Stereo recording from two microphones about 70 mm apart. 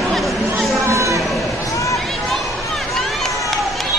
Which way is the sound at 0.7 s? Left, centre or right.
Right.